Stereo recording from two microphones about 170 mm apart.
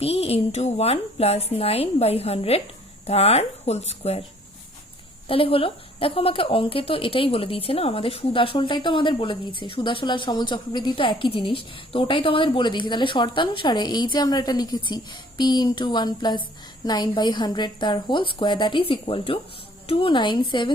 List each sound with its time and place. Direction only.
0.0 s a woman's voice: 35° left (ahead or behind)
5.3 s a woman's voice: 35° left (ahead or behind)